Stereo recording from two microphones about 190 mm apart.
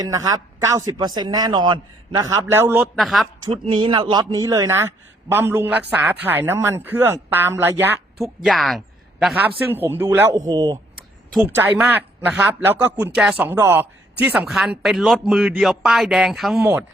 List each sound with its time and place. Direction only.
0.0 s a man's voice: 20° right (ahead or behind); by 3.2 s centre (ahead or behind)
3.5 s a man's voice: 30° right (ahead or behind); by 7.9 s 10° right (ahead or behind)
8.2 s a woman's voice: centre (ahead or behind)
9.7 s a man's voice: 10° right (ahead or behind)
11.3 s a man's voice: 10° right (ahead or behind)